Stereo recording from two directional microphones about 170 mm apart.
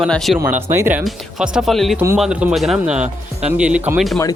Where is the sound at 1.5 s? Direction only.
Centre (ahead or behind).